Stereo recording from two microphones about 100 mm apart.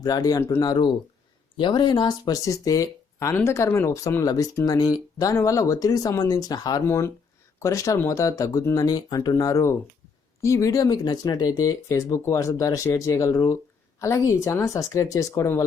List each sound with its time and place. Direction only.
0.0 s speech: 40° left (ahead or behind)
6.8 s speech: 30° left (ahead or behind); by 9.3 s 45° left (ahead or behind)
9.3 s speech: 30° left (ahead or behind)